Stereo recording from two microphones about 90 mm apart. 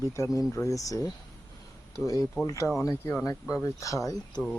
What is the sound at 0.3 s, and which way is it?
Speech, 35° left (ahead or behind).